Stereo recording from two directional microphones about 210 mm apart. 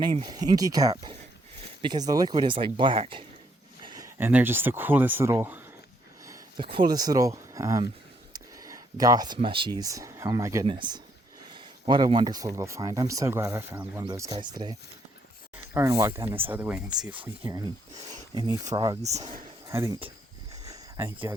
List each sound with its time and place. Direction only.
0.2 s speech: 20° right (ahead or behind); by 17.2 s 5° right (ahead or behind)
17.4 s speech: 15° right (ahead or behind)
19.0 s speech: 35° right (ahead or behind)
19.6 s speech: 15° right (ahead or behind)
20.7 s a sound: 15° right (ahead or behind)